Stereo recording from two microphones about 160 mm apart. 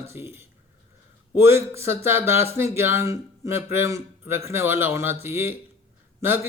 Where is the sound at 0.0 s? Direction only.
15° right (ahead or behind).